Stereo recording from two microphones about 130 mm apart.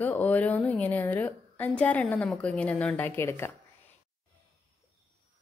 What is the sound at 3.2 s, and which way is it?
Speech, 20° left (ahead or behind).